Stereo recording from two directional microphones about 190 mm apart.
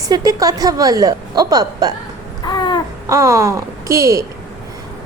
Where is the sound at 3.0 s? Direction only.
15° right (ahead or behind).